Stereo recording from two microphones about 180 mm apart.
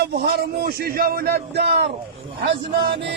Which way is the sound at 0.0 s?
60° right (ahead or behind).